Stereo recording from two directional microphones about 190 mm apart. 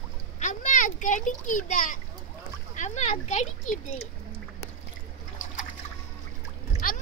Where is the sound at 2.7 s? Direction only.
40° left (ahead or behind).